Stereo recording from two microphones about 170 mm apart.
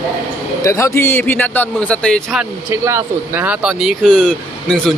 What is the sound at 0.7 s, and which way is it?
A man's voice, 15° left (ahead or behind).